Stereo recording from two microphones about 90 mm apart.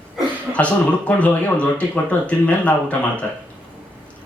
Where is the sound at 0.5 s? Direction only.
15° left (ahead or behind).